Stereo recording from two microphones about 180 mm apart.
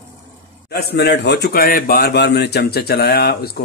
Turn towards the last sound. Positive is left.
turn(degrees=60)  # may be behind; listen again after turning